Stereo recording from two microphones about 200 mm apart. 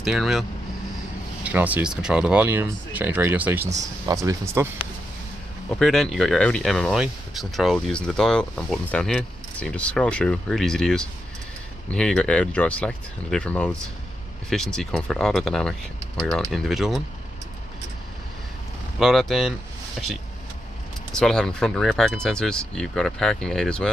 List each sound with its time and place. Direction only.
0.0 s speech: centre (ahead or behind)
5.7 s speech: 5° left (ahead or behind)
18.9 s speech: centre (ahead or behind)
21.1 s speech: 5° left (ahead or behind)